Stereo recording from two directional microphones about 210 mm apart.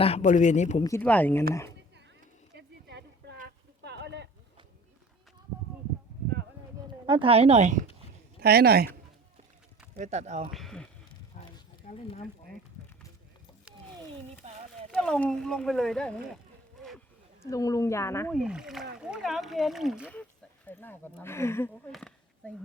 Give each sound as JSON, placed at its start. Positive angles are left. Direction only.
{"t": 0.0, "sound": "speech", "side_deg": 30}
{"t": 0.8, "sound": "speech", "side_deg": 15}
{"t": 2.6, "sound": "a sound", "side_deg": -55}
{"t": 7.0, "sound": "speech", "side_deg": -25}
{"t": 8.4, "sound": "speech", "side_deg": -50}
{"t": 9.9, "sound": "speech", "side_deg": -35}
{"t": 10.5, "sound": "speech", "side_deg": 0}
{"t": 11.3, "sound": "a sound", "side_deg": 40}
{"t": 14.7, "sound": "speech", "side_deg": 5}
{"t": 17.4, "sound": "speech", "side_deg": 15}
{"t": 18.3, "sound": "speech", "side_deg": -5}